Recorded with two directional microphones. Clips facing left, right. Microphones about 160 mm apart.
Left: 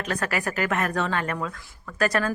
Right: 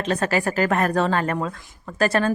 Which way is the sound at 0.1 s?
25° right (ahead or behind).